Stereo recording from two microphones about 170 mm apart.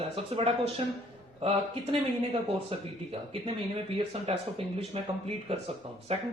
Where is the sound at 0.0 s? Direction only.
35° right (ahead or behind).